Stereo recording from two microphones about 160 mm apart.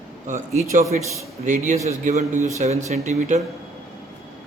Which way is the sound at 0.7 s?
50° right (ahead or behind).